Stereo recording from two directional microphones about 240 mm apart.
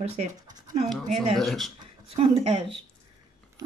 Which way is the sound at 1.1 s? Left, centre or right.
Centre.